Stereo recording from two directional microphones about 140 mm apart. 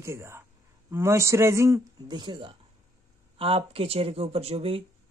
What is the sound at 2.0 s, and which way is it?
Speech, 35° right (ahead or behind).